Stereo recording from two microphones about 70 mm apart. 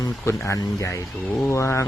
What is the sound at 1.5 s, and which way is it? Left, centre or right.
Mantra, left.